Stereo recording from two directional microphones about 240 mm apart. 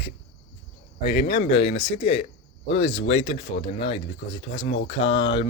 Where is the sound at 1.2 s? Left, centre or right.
Left.